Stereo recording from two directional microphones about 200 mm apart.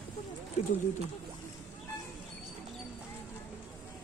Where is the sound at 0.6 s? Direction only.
35° left (ahead or behind).